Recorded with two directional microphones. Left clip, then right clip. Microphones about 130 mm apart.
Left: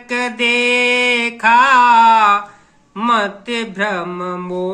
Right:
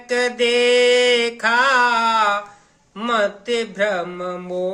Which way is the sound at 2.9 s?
40° right (ahead or behind).